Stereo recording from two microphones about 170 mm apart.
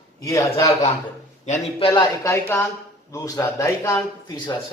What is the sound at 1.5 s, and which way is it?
Speech, 45° left (ahead or behind).